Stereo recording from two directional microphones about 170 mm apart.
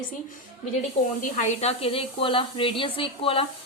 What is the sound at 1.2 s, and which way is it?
A woman's voice, 45° left (ahead or behind).